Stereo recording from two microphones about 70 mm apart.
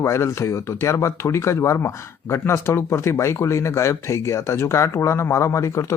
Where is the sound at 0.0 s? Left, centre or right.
Left.